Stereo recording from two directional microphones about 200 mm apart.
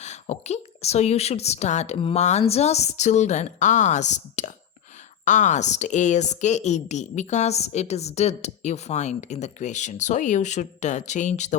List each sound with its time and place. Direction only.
0.0 s speech: 35° left (ahead or behind)